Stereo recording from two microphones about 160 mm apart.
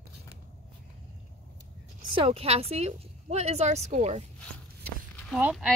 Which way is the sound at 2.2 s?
40° right (ahead or behind).